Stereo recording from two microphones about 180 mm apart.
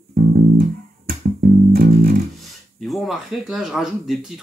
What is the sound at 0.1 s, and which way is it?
Music, 50° right (ahead or behind).